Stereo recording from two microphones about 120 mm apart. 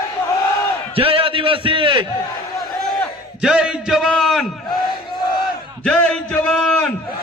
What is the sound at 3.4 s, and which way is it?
A man's voice, 5° right (ahead or behind).